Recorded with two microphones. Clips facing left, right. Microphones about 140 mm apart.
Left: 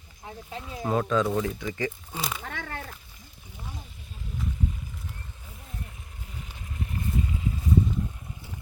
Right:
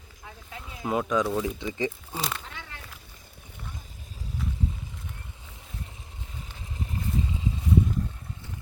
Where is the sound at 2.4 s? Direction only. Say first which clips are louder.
Left 7 dB; 55° left (ahead or behind).